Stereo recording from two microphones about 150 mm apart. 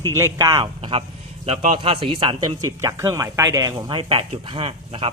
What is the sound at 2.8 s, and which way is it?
Speech, 20° right (ahead or behind).